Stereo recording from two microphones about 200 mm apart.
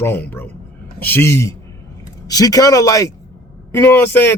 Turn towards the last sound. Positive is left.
turn(degrees=10)  # may be behind; listen again after turning